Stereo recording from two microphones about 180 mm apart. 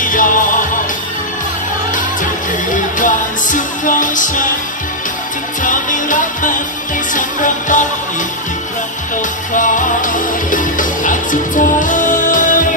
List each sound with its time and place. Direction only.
0.0 s music: 45° left (ahead or behind)
2.7 s music: 45° left (ahead or behind)
5.6 s music: 45° left (ahead or behind)
9.1 s music: 45° left (ahead or behind)